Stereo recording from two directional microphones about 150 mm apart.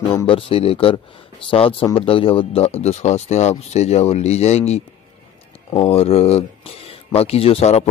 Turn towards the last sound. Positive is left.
turn(degrees=45)  # may be behind; listen again after turning